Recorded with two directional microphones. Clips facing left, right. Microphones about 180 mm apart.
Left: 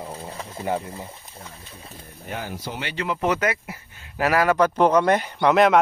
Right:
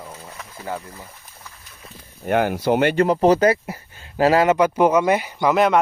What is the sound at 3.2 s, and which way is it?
Speech, 35° right (ahead or behind).